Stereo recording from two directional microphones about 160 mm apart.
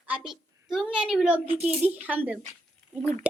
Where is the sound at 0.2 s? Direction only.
Centre (ahead or behind).